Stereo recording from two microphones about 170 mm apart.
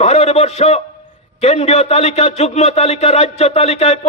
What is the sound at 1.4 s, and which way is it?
A man's voice, 35° left (ahead or behind).